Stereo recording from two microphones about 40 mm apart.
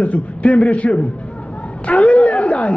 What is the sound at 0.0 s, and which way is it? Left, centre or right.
A man's voice, left.